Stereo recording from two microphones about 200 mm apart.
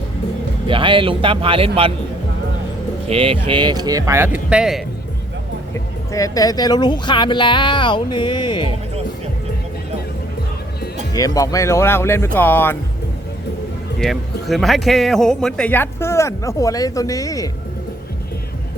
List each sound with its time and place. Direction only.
0.7 s speech: 25° right (ahead or behind)
3.1 s speech: 25° right (ahead or behind); by 4.8 s 5° right (ahead or behind)
6.1 s speech: 15° left (ahead or behind)
11.1 s speech: 15° left (ahead or behind)
14.0 s speech: centre (ahead or behind); by 17.5 s 15° left (ahead or behind)